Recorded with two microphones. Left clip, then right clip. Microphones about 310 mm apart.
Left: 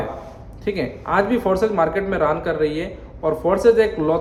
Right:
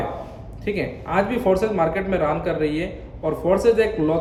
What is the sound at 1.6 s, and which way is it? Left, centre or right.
Speech, left.